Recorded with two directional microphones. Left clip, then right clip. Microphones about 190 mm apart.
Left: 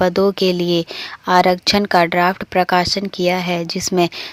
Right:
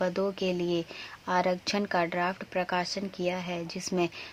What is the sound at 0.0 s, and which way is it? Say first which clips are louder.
Speech: left 14 dB; 35° left (ahead or behind).